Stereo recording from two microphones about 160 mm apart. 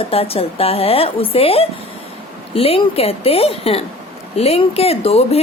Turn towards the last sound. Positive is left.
turn(degrees=40)  # may be behind; listen again after turning